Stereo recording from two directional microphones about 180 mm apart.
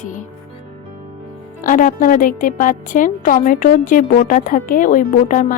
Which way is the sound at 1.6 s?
50° left (ahead or behind).